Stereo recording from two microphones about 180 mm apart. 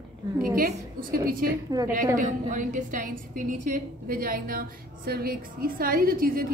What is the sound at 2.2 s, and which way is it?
A woman's voice, 45° right (ahead or behind).